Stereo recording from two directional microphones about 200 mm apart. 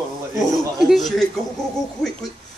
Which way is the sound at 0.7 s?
Centre (ahead or behind).